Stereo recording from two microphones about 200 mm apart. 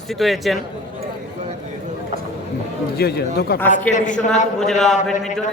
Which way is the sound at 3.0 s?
55° left (ahead or behind).